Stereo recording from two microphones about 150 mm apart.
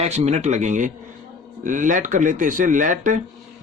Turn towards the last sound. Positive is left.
turn(degrees=-60)  # may be behind; listen again after turning